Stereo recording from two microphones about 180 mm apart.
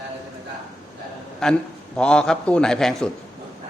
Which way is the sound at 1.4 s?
5° left (ahead or behind).